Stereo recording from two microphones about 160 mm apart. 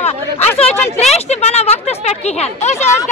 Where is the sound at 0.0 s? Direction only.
40° left (ahead or behind).